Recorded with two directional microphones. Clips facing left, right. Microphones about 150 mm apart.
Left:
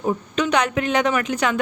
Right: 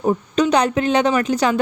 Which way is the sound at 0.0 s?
35° right (ahead or behind).